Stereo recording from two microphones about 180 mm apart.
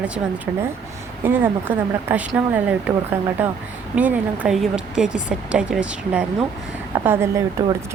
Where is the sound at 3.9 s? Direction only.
10° right (ahead or behind).